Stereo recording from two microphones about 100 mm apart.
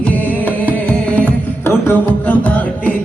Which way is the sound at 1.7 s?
20° left (ahead or behind).